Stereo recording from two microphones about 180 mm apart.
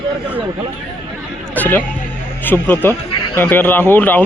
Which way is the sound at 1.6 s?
10° left (ahead or behind).